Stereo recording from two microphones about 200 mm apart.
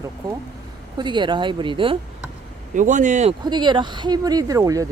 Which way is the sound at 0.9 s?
25° right (ahead or behind).